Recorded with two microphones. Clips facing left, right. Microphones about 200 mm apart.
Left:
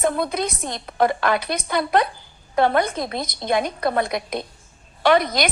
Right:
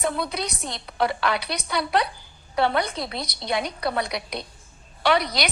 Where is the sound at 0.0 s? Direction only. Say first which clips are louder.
Left 5 dB; 50° left (ahead or behind).